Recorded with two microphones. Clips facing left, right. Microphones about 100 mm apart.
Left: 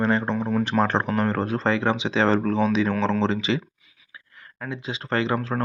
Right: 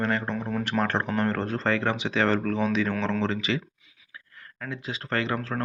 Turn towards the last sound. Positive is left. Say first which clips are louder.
# left 4 dB
turn(degrees=15)  # may be behind; listen again after turning